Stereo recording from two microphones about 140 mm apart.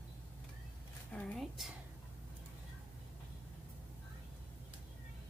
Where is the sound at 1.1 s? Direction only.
5° left (ahead or behind).